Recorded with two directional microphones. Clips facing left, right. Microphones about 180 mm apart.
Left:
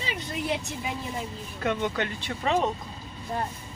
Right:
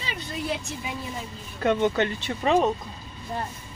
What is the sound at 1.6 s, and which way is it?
Speech, 30° right (ahead or behind).